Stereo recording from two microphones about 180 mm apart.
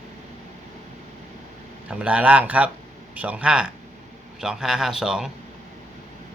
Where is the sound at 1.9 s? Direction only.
5° right (ahead or behind).